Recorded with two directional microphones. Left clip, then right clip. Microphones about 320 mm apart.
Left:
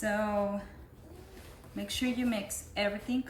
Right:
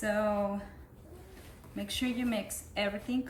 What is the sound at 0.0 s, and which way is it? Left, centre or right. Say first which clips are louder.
Speech: even; centre.